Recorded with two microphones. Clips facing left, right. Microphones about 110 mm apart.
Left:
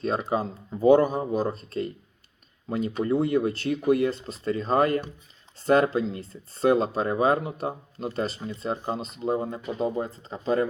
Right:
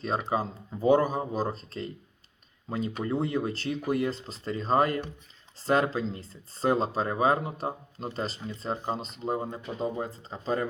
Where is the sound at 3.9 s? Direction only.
35° right (ahead or behind).